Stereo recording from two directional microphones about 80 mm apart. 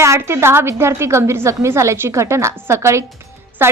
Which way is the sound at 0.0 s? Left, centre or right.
Right.